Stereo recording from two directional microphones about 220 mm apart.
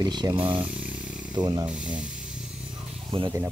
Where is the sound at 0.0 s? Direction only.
20° right (ahead or behind).